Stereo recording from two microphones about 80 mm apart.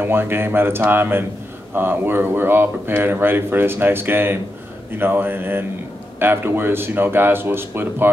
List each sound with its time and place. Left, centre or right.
0.0 s speech: right